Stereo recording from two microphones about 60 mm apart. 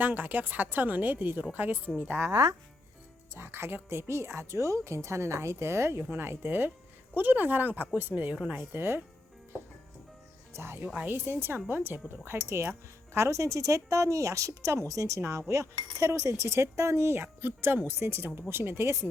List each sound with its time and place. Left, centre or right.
0.0 s speech: right
3.3 s a woman's voice: right
8.7 s speech: right
10.5 s a woman's voice: right
10.8 s speech: right
13.1 s speech: right
15.2 s a woman's voice: right